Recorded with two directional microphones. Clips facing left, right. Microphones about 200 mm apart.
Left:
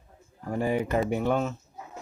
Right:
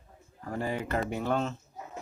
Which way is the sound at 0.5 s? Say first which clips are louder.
Left 5 dB; 15° left (ahead or behind).